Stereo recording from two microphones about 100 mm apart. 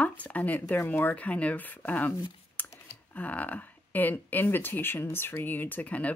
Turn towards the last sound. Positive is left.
turn(degrees=15)  # may be behind; listen again after turning